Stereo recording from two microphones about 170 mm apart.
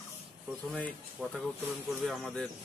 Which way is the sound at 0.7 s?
5° left (ahead or behind).